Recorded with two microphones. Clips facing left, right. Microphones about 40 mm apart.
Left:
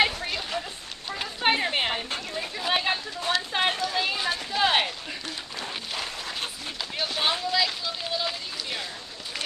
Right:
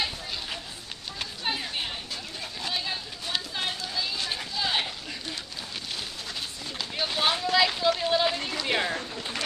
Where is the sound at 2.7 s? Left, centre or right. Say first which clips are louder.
Left 8 dB; left.